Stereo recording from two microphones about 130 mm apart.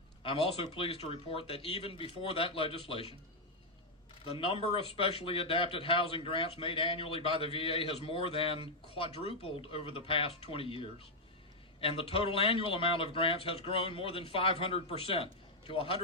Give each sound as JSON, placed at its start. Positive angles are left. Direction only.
{"t": 0.2, "sound": "speech", "side_deg": 45}
{"t": 4.3, "sound": "speech", "side_deg": 45}